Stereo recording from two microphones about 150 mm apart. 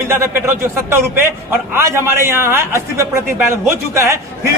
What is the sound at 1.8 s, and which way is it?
Speech, 15° right (ahead or behind).